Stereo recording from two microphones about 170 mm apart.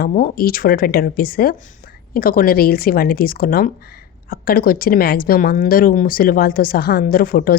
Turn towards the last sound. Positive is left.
turn(degrees=60)  # may be behind; listen again after turning